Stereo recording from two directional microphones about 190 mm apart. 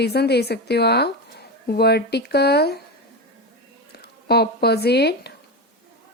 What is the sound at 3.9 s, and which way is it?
Speech, 55° left (ahead or behind).